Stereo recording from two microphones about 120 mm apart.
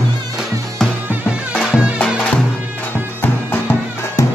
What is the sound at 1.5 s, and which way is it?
Music, 5° right (ahead or behind).